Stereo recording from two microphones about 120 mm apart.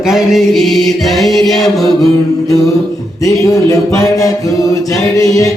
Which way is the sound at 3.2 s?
25° left (ahead or behind).